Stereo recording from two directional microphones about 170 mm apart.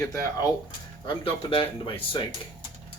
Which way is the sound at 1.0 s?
30° left (ahead or behind).